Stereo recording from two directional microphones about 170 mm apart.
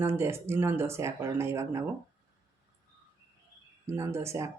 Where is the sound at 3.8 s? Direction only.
15° right (ahead or behind).